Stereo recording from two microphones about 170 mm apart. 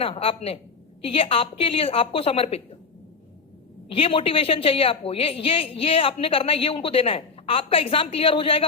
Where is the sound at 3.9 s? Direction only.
35° left (ahead or behind).